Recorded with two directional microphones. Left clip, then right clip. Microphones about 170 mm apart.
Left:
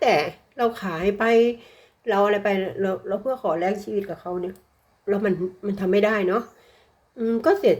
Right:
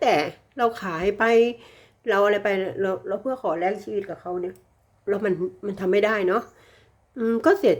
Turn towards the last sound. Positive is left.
turn(degrees=-25)  # may be behind; listen again after turning